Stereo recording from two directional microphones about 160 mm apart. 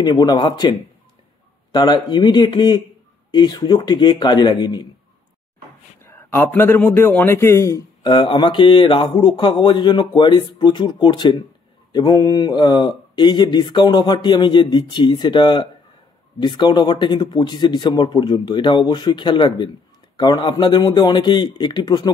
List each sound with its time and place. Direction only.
0.0 s speech: 25° left (ahead or behind)
6.0 s a man's voice: 15° left (ahead or behind)
8.1 s speech: 30° left (ahead or behind)